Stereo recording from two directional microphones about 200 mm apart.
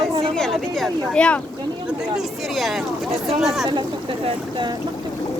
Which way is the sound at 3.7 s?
25° right (ahead or behind).